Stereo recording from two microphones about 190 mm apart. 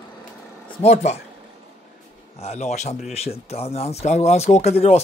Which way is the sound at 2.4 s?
35° left (ahead or behind).